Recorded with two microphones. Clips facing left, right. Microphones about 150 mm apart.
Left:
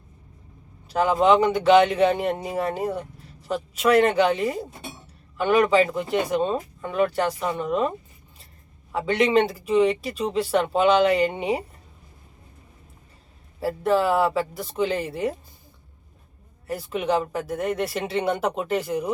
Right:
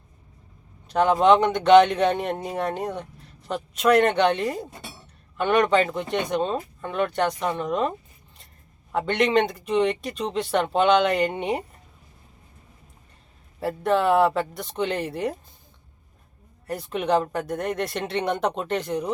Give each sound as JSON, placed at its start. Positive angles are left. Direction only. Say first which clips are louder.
{"t": 0.9, "sound": "speech", "louder": "right 1 dB", "side_deg": 5}
{"t": 13.6, "sound": "speech", "louder": "left 1 dB", "side_deg": 5}
{"t": 16.6, "sound": "speech", "louder": "even", "side_deg": 0}